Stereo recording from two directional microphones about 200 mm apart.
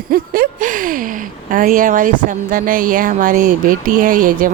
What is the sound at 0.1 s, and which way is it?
Speech, 45° right (ahead or behind).